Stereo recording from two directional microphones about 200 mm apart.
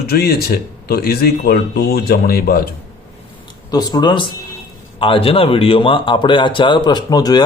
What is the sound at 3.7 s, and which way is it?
Speech, 20° left (ahead or behind).